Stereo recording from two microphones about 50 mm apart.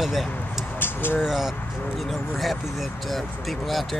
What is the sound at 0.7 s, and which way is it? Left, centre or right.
Vehicle, left.